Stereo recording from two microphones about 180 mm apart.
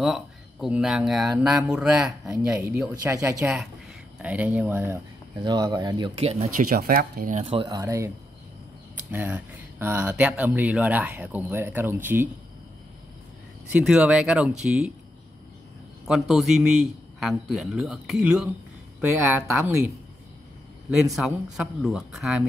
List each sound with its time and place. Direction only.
0.0 s a man's voice: centre (ahead or behind); by 6.3 s 30° right (ahead or behind)
6.5 s speech: 55° right (ahead or behind)
7.3 s speech: 30° right (ahead or behind); by 12.3 s 10° right (ahead or behind)
13.7 s a man's voice: 5° right (ahead or behind)
16.1 s a man's voice: centre (ahead or behind)
20.9 s a man's voice: 5° right (ahead or behind)